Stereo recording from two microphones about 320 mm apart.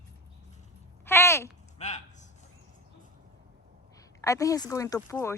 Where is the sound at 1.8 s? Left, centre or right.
Left.